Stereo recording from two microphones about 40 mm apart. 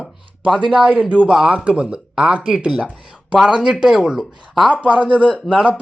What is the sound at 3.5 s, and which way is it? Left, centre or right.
Speech, right.